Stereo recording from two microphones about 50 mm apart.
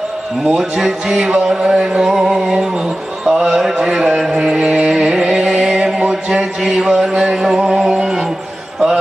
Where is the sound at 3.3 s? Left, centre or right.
Centre.